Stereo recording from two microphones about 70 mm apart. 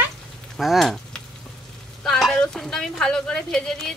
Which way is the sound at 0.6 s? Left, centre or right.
Centre.